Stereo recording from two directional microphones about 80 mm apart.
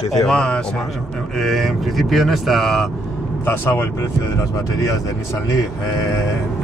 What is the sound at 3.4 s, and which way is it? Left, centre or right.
Speech, left.